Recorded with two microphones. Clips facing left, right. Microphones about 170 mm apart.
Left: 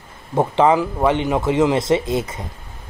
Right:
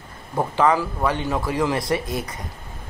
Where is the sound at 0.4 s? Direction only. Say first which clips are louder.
Left 4 dB; 25° left (ahead or behind).